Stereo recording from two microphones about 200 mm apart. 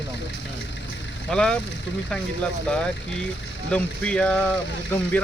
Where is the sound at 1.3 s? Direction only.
5° left (ahead or behind).